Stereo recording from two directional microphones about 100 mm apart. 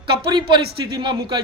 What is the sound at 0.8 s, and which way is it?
Speech, 45° right (ahead or behind).